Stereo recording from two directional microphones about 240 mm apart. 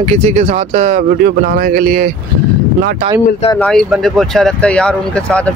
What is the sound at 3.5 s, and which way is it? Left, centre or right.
Speech, centre.